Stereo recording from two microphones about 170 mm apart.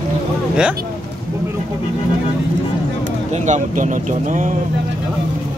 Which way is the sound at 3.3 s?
45° right (ahead or behind).